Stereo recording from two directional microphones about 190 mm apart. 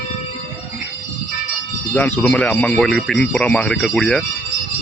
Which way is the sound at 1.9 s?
10° left (ahead or behind).